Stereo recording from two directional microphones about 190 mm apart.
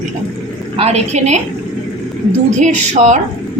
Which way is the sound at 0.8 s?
35° right (ahead or behind).